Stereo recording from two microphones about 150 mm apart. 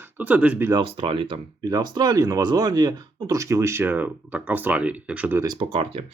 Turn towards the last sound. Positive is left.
turn(degrees=-35)  # may be behind; listen again after turning